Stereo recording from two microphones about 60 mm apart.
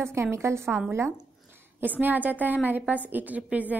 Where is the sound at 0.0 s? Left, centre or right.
Right.